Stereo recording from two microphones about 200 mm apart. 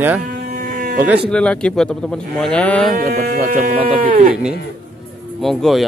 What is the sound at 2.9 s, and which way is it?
Speech, 50° right (ahead or behind).